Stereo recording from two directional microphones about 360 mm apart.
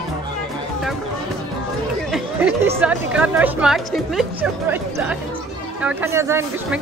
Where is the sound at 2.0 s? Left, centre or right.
Centre.